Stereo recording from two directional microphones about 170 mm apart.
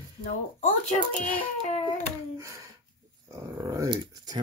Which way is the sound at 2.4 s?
20° right (ahead or behind).